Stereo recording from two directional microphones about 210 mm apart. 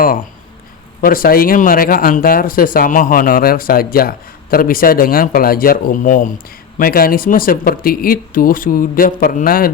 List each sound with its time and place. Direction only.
1.0 s speech: 45° left (ahead or behind)